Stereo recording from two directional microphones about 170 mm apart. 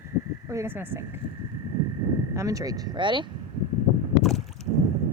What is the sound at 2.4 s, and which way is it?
Speech, 20° right (ahead or behind).